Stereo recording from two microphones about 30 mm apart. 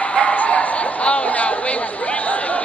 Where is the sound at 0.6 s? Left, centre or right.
Left.